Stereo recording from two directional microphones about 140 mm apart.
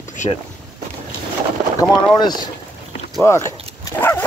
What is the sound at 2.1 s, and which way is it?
Speech, 30° left (ahead or behind).